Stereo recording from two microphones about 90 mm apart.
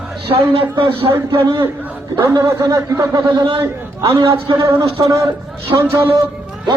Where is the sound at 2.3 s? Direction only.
45° right (ahead or behind).